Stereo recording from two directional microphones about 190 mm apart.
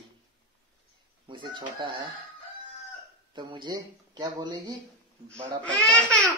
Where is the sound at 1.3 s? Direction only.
25° right (ahead or behind).